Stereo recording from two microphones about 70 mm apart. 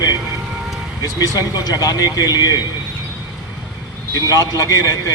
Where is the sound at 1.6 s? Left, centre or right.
Left.